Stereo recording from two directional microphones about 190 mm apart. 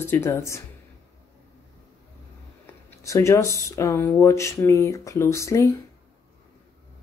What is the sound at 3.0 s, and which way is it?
Speech, 15° left (ahead or behind).